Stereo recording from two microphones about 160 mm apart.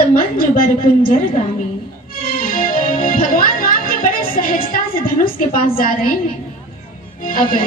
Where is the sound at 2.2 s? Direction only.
65° left (ahead or behind).